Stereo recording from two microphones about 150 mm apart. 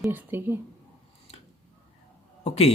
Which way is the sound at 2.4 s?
45° left (ahead or behind).